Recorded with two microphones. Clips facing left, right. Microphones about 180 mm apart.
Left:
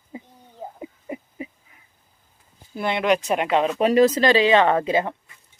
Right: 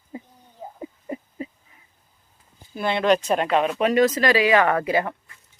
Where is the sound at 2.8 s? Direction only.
20° left (ahead or behind).